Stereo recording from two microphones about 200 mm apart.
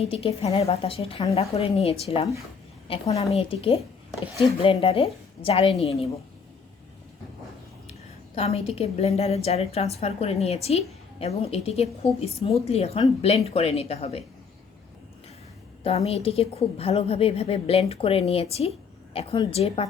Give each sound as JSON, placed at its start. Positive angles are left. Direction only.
{"t": 0.0, "sound": "a woman's voice", "side_deg": 30}
{"t": 8.4, "sound": "a woman's voice", "side_deg": 30}
{"t": 15.8, "sound": "a woman's voice", "side_deg": 30}